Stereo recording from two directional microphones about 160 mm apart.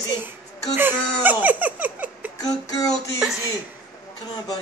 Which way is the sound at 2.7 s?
20° left (ahead or behind).